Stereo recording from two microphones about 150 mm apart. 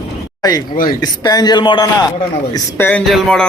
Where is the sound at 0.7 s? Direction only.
70° left (ahead or behind).